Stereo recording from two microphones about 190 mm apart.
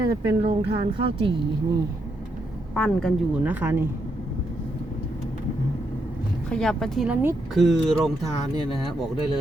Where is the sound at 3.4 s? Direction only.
10° right (ahead or behind).